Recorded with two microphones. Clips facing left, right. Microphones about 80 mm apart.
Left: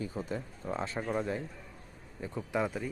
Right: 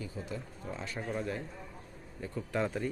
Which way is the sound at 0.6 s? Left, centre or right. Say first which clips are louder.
Left 5 dB; left.